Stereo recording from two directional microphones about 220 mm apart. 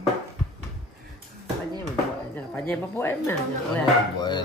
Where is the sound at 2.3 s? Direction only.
10° left (ahead or behind).